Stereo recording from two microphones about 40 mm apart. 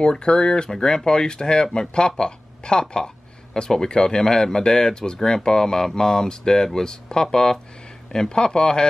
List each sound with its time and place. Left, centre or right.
0.0 s speech: left